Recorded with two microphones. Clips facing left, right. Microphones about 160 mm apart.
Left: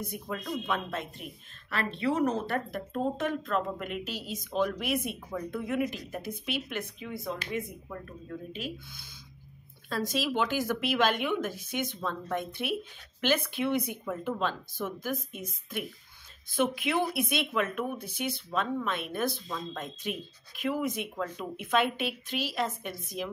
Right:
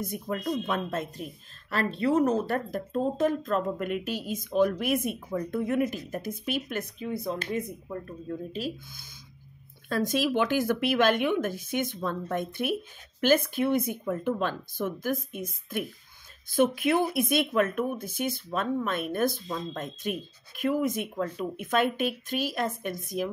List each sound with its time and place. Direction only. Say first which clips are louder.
0.0 s speech: right 5 dB; 45° right (ahead or behind)